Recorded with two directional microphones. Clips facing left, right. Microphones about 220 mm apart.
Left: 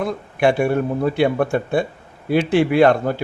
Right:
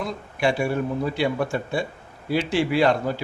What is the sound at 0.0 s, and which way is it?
Speech, 55° left (ahead or behind).